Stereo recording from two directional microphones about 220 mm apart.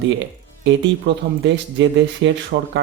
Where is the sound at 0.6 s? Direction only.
55° right (ahead or behind).